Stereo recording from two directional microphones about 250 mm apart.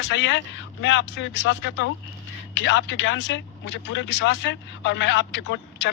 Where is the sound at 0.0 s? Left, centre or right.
Left.